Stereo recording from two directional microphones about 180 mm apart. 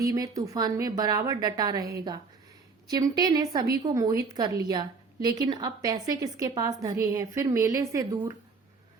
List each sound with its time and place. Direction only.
0.0 s a woman's voice: 20° right (ahead or behind)